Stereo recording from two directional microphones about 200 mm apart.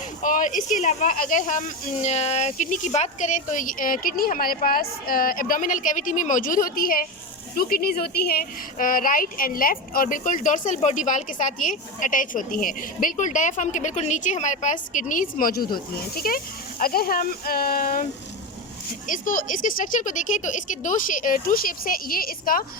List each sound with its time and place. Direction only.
0.2 s speech: 40° left (ahead or behind)
19.0 s speech: 40° left (ahead or behind)